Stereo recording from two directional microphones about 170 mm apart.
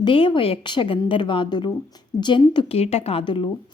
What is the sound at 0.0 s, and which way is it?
A woman's voice, 30° left (ahead or behind).